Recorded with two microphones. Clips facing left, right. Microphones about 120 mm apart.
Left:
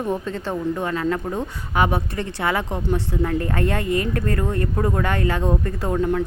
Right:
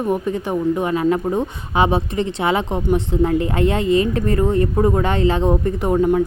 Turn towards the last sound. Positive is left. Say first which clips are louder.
# right 5 dB
turn(degrees=-20)  # may be behind; listen again after turning